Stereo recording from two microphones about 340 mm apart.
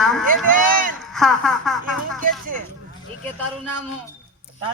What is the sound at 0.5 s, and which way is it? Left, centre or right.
Run, right.